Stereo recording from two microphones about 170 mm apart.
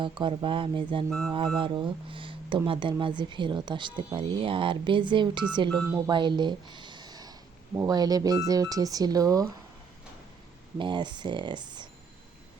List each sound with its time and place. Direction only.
0.0 s speech: 30° right (ahead or behind)
5.7 s speech: 5° left (ahead or behind)
6.1 s speech: 25° right (ahead or behind)
10.8 s speech: 30° right (ahead or behind)